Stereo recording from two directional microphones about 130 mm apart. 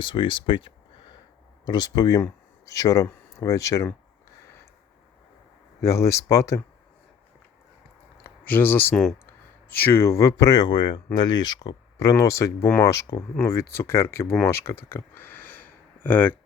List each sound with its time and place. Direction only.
0.0 s speech: 40° left (ahead or behind)
5.8 s speech: 25° left (ahead or behind)
8.2 s speech: 15° left (ahead or behind)